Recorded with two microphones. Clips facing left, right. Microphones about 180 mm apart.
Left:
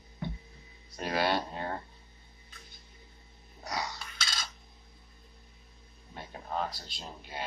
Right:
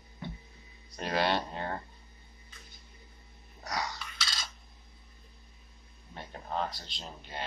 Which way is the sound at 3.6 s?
5° left (ahead or behind).